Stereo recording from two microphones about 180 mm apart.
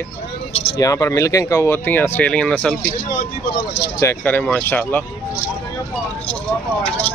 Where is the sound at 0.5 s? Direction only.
35° left (ahead or behind).